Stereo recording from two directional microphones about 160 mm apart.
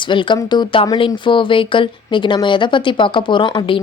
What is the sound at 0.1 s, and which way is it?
A woman's voice, 30° left (ahead or behind).